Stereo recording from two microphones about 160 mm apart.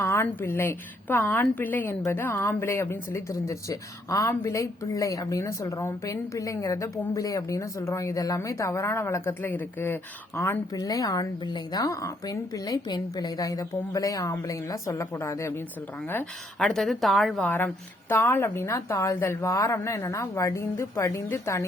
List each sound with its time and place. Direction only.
0.0 s a woman's voice: 15° left (ahead or behind)
16.6 s a woman's voice: centre (ahead or behind)
18.1 s a woman's voice: 15° left (ahead or behind)